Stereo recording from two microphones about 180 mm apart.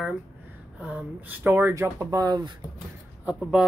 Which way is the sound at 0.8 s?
10° right (ahead or behind).